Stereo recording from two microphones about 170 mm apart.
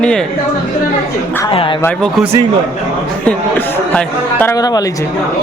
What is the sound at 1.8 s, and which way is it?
Speech, 5° left (ahead or behind).